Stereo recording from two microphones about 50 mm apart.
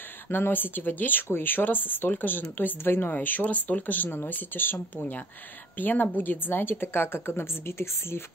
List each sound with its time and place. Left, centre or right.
0.3 s a woman's voice: left
3.2 s a woman's voice: left